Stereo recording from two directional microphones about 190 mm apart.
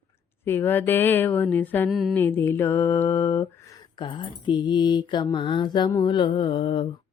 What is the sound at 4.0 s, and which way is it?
Mantra, 25° left (ahead or behind).